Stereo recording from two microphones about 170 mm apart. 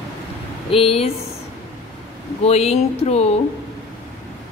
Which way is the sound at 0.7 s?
35° left (ahead or behind).